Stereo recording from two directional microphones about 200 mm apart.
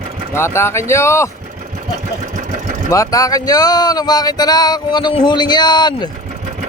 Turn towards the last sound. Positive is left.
turn(degrees=20)  # may be behind; listen again after turning